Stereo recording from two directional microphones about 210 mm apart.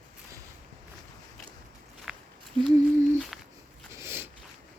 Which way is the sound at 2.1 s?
Centre (ahead or behind).